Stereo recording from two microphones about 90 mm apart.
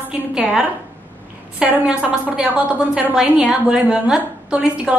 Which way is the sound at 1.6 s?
15° right (ahead or behind).